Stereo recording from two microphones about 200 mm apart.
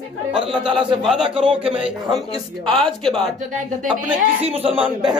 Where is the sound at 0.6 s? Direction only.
25° right (ahead or behind).